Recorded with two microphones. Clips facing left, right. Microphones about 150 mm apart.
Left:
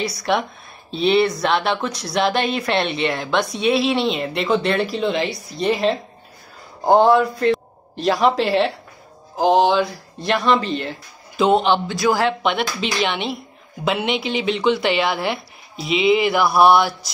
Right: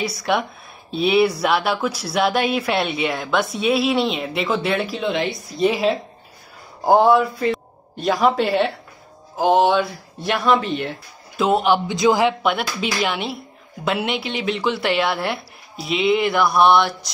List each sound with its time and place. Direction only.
0.2 s a man's voice: centre (ahead or behind)
11.9 s a man's voice: 20° right (ahead or behind)
12.4 s speech: 5° right (ahead or behind)